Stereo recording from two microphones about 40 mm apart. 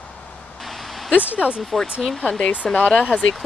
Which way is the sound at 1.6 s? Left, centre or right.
Centre.